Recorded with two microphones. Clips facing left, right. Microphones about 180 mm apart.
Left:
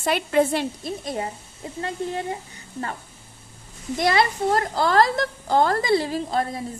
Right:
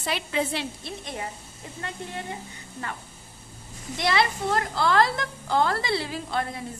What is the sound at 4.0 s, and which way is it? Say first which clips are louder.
A woman's voice: left 4 dB; 45° left (ahead or behind).